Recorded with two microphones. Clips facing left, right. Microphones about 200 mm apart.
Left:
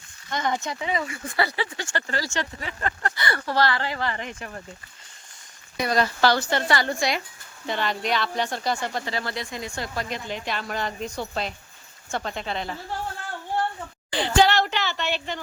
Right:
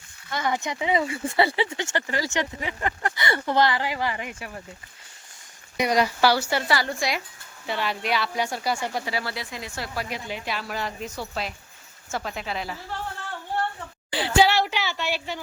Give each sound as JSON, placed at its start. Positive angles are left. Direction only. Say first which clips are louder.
{"t": 0.3, "sound": "speech", "louder": "even", "side_deg": -5}
{"t": 5.7, "sound": "speech", "louder": "right 1 dB", "side_deg": -15}
{"t": 14.1, "sound": "speech", "louder": "even", "side_deg": -5}